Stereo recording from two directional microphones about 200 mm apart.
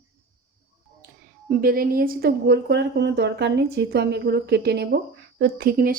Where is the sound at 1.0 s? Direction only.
45° right (ahead or behind).